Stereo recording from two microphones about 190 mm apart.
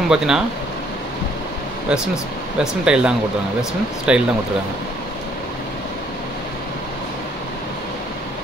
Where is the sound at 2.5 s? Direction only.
5° right (ahead or behind).